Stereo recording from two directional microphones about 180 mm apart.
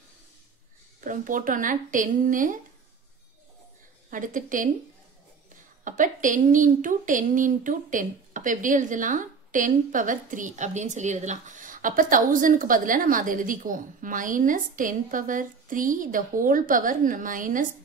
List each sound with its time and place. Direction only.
1.0 s a woman's voice: 45° right (ahead or behind)
4.1 s a woman's voice: 45° right (ahead or behind)
5.9 s a woman's voice: 45° right (ahead or behind)